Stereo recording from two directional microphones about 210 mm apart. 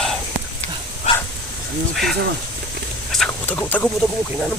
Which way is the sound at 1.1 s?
30° left (ahead or behind).